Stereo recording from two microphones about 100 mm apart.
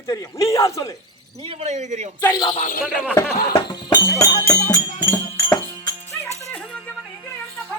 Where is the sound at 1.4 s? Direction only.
85° right.